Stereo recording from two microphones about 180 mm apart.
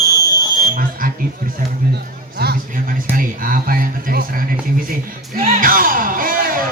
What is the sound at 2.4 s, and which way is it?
Speech, 55° right (ahead or behind).